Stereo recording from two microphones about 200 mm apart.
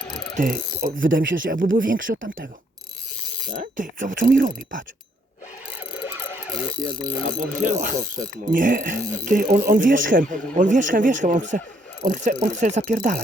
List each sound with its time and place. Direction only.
0.0 s mechanisms: 5° left (ahead or behind)
0.3 s speech: 45° right (ahead or behind)
3.5 s speech: 40° right (ahead or behind)
7.3 s speech: 40° right (ahead or behind)